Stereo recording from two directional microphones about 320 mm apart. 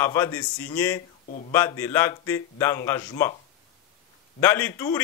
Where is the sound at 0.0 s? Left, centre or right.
Centre.